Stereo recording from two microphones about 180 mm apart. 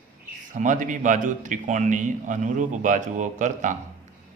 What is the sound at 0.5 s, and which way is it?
A man's voice, 45° right (ahead or behind).